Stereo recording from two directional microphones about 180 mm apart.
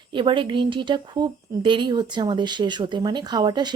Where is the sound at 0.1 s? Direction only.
25° right (ahead or behind).